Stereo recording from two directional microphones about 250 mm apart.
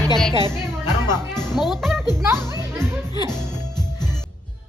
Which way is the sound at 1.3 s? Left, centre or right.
Centre.